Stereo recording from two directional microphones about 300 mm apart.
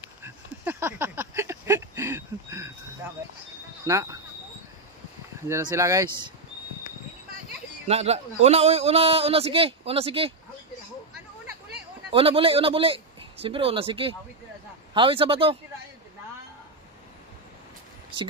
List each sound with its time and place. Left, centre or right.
0.2 s a sound: centre
3.8 s speech: centre
5.5 s speech: centre
7.9 s a man's voice: right
12.1 s a man's voice: centre